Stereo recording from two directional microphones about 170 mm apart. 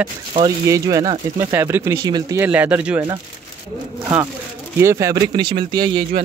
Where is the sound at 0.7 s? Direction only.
20° right (ahead or behind).